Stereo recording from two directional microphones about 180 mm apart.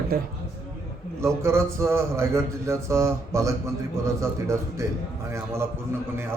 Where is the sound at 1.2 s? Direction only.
15° right (ahead or behind).